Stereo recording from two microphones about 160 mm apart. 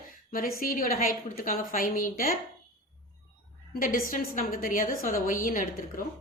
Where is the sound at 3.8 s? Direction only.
60° left (ahead or behind).